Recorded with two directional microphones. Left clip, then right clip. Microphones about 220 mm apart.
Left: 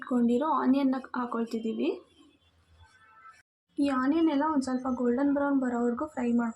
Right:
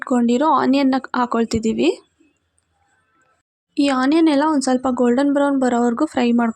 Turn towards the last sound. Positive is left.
turn(degrees=-45)  # may be behind; listen again after turning